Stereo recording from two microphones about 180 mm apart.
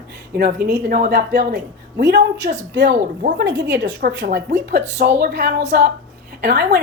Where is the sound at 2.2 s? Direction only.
45° right (ahead or behind).